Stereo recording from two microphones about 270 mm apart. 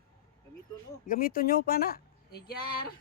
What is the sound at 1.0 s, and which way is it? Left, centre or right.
Speech, left.